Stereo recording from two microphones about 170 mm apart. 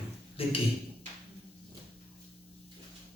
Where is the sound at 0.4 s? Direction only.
35° left (ahead or behind).